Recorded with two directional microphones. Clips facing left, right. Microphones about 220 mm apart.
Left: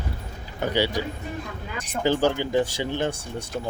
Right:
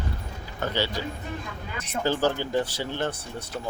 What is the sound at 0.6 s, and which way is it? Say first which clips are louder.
Speech: left 4 dB; 15° left (ahead or behind).